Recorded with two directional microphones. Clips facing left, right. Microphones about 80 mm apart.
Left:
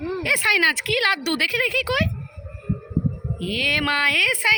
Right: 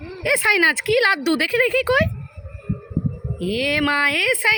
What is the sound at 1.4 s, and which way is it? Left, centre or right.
Speech, right.